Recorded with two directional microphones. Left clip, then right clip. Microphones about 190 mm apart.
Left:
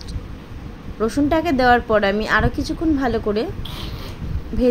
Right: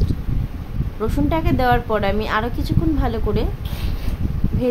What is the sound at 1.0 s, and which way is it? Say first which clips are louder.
A woman's voice: left 3 dB; 15° left (ahead or behind).